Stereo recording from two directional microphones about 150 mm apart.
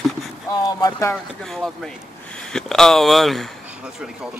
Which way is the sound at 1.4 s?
Centre (ahead or behind).